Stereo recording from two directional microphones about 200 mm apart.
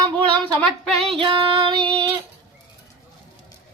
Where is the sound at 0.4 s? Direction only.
Centre (ahead or behind).